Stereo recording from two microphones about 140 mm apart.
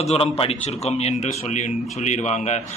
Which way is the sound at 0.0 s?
45° left (ahead or behind).